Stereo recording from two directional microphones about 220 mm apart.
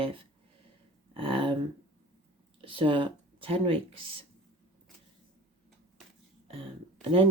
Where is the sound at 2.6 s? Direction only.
25° right (ahead or behind).